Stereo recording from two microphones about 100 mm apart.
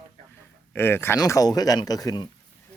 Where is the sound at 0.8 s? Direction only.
25° left (ahead or behind).